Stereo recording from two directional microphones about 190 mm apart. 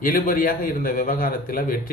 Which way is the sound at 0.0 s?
45° left (ahead or behind).